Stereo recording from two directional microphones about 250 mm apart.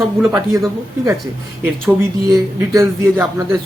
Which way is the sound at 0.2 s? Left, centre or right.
Centre.